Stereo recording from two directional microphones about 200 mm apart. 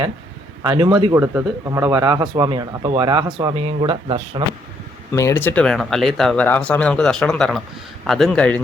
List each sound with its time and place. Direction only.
0.6 s a man's voice: 25° right (ahead or behind)
1.2 s a man's voice: 10° right (ahead or behind); by 4.4 s 25° right (ahead or behind)
5.1 s speech: 15° left (ahead or behind)